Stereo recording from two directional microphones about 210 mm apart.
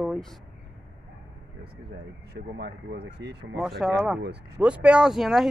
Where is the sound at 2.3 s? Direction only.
50° right (ahead or behind).